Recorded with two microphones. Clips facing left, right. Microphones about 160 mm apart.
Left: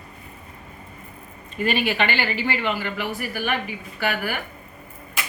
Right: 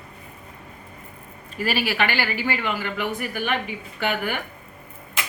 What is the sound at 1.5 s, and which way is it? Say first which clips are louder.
Speech: left 1 dB; 5° right (ahead or behind).